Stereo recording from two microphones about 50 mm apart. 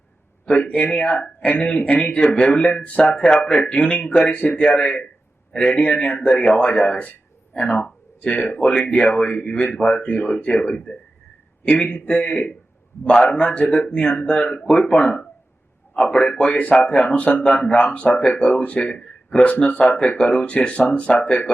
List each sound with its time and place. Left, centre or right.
0.4 s speech: left